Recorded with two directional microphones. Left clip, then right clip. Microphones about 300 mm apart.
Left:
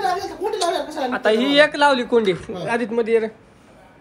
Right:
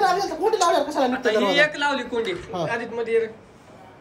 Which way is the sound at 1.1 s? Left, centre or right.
Centre.